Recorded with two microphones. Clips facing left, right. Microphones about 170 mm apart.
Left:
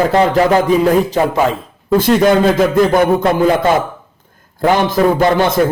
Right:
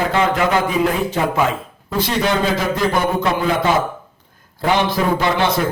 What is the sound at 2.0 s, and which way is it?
A man's voice, 50° left (ahead or behind).